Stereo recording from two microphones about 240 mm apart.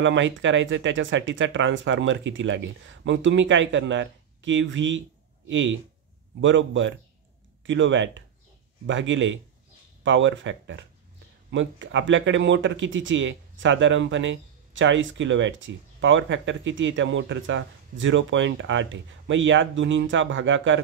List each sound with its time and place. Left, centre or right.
0.0 s speech: right